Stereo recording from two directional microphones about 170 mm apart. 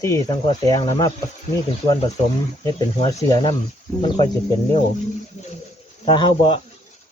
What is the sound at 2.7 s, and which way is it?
Speech, 25° left (ahead or behind).